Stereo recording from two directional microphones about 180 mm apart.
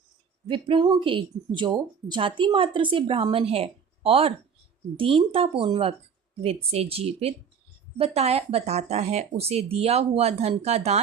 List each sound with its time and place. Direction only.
0.4 s speech: 30° right (ahead or behind)